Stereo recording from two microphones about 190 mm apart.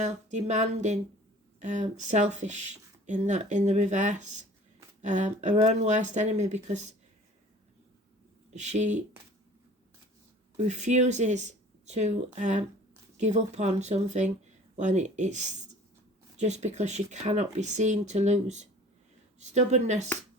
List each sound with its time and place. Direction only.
0.0 s speech: 40° right (ahead or behind)
8.5 s speech: 40° right (ahead or behind)
10.7 s speech: 35° right (ahead or behind)